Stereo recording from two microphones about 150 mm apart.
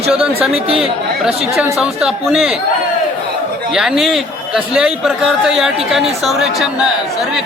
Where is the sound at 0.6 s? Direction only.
40° right (ahead or behind).